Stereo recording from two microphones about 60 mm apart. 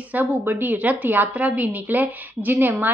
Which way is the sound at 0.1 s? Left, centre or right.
Right.